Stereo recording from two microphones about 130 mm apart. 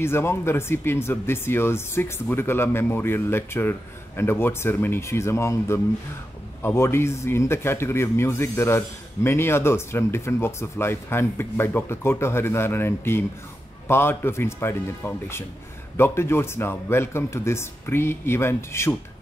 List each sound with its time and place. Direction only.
0.0 s speech: 20° left (ahead or behind)